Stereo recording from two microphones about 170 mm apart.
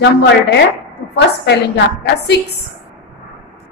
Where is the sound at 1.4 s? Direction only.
85° left.